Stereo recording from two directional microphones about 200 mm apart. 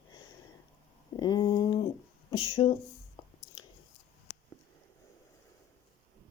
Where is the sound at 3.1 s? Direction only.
20° left (ahead or behind).